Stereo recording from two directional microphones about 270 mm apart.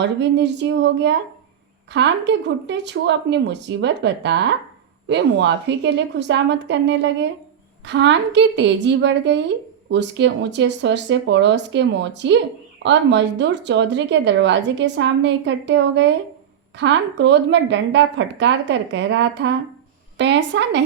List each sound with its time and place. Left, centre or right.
0.0 s a woman's voice: right